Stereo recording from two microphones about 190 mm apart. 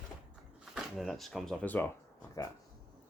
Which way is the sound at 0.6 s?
Centre (ahead or behind).